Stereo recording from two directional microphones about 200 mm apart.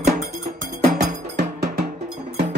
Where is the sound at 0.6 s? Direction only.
40° right (ahead or behind).